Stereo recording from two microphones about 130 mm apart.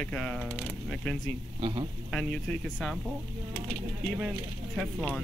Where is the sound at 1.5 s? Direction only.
45° right (ahead or behind).